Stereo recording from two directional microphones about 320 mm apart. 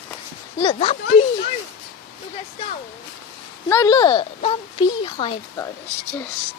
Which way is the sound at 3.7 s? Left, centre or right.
Centre.